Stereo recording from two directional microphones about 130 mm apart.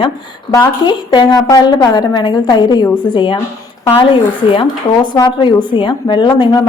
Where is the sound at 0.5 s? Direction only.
35° left (ahead or behind).